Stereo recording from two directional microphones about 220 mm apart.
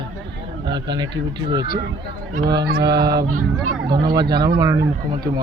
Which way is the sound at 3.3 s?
85° right.